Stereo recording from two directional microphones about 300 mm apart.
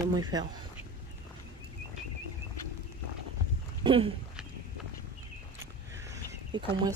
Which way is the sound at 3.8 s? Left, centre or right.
Centre.